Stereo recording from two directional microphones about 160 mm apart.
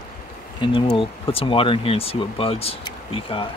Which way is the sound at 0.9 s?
35° left (ahead or behind).